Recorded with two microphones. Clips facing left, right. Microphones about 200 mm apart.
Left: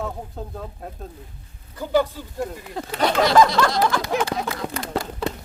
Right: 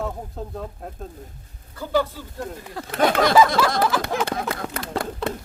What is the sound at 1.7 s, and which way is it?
Speech, 15° left (ahead or behind).